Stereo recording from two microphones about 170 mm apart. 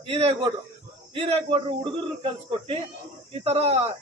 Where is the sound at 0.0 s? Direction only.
35° right (ahead or behind).